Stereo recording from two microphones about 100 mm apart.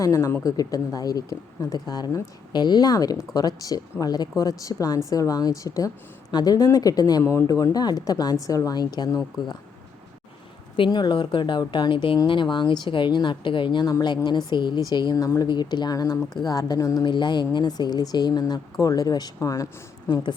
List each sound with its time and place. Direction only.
0.0 s speech: 35° left (ahead or behind)
10.8 s speech: 50° left (ahead or behind)
17.1 s speech: 50° left (ahead or behind); by 19.6 s 35° left (ahead or behind)